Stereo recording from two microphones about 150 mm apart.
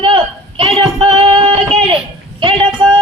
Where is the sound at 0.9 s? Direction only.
40° right (ahead or behind).